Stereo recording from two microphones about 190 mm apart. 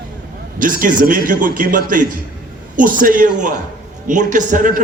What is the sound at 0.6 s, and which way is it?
A man's voice, 45° right (ahead or behind).